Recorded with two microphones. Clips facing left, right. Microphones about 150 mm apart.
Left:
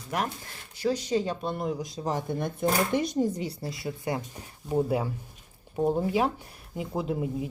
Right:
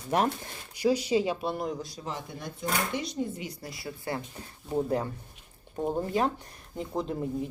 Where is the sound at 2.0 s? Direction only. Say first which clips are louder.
Left 10 dB; 50° left (ahead or behind); by 4.2 s 20° left (ahead or behind).